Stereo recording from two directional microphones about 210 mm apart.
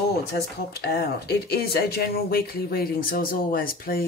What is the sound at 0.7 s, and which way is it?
Speech, 50° left (ahead or behind).